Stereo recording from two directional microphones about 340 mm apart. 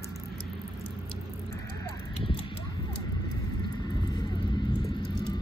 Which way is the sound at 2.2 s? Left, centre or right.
Centre.